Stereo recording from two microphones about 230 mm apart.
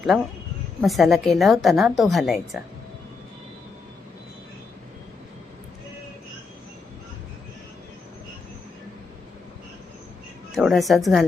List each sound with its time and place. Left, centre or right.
0.1 s a woman's voice: centre
10.5 s a woman's voice: centre